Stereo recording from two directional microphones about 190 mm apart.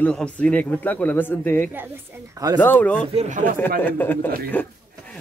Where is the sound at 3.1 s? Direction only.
35° right (ahead or behind).